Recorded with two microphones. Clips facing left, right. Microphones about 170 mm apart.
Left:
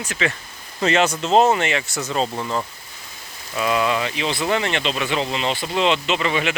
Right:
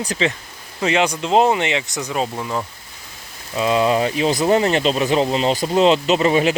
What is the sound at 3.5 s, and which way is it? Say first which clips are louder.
Speech: right 4 dB; 25° right (ahead or behind).